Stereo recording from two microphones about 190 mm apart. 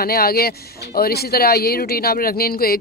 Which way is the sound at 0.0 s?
55° left (ahead or behind).